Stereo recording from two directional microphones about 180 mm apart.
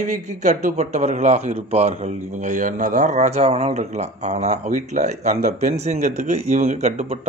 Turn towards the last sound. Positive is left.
turn(degrees=-40)  # may be behind; listen again after turning